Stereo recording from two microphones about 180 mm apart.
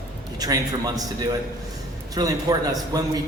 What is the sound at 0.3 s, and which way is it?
A man's voice, 20° right (ahead or behind).